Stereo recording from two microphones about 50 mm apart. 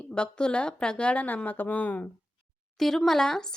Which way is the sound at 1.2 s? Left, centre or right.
Left.